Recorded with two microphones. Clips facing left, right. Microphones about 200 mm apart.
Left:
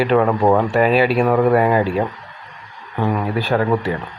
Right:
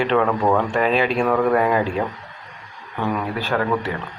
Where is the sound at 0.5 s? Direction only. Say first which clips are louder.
Left 4 dB; 10° left (ahead or behind).